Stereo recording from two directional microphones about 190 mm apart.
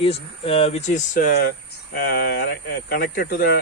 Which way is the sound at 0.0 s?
30° left (ahead or behind).